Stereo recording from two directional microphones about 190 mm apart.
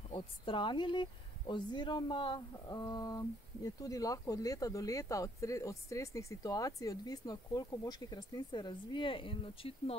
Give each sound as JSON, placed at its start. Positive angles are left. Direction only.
{"t": 0.1, "sound": "speech", "side_deg": 25}